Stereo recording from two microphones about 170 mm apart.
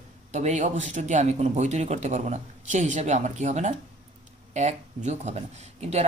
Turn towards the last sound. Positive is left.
turn(degrees=-40)  # may be behind; listen again after turning